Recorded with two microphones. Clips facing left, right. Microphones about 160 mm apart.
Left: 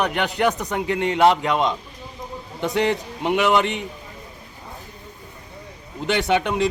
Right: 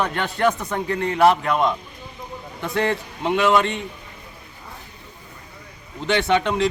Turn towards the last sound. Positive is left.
turn(degrees=10)  # may be behind; listen again after turning